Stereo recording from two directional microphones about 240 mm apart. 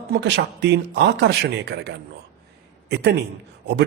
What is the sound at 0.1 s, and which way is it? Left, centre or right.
Speech, right.